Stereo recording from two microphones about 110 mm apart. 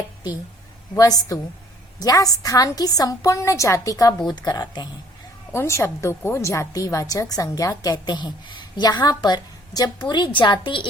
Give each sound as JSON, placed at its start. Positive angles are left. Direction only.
{"t": 0.9, "sound": "a woman's voice", "side_deg": 30}
{"t": 5.5, "sound": "a woman's voice", "side_deg": 25}